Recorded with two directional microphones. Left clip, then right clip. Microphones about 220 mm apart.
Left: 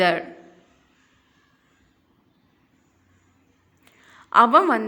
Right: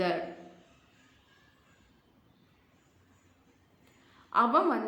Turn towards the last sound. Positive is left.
turn(degrees=45)  # may be behind; listen again after turning